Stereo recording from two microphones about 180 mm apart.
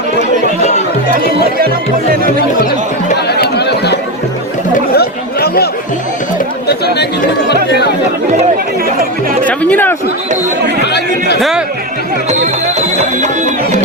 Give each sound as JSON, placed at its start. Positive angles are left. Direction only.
{"t": 1.1, "sound": "speech", "side_deg": -55}
{"t": 3.2, "sound": "chatter", "side_deg": 65}
{"t": 6.7, "sound": "chatter", "side_deg": 65}
{"t": 9.5, "sound": "chatter", "side_deg": 10}
{"t": 11.3, "sound": "speech", "side_deg": 0}